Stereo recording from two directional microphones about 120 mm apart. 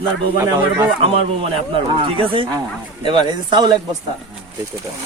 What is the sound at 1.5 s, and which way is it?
Speech, 45° right (ahead or behind).